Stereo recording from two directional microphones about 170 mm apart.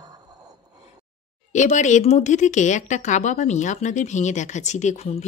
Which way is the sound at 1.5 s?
45° left (ahead or behind).